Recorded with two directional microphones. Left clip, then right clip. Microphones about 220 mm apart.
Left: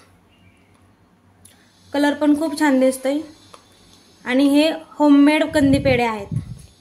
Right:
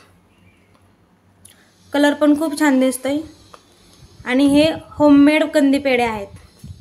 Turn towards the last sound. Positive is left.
turn(degrees=-5)  # may be behind; listen again after turning